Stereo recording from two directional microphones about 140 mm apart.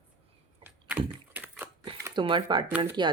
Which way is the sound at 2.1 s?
35° right (ahead or behind).